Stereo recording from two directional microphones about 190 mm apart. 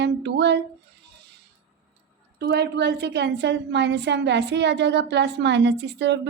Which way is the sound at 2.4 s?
60° right (ahead or behind).